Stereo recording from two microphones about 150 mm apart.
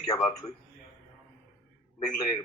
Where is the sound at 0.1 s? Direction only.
20° left (ahead or behind).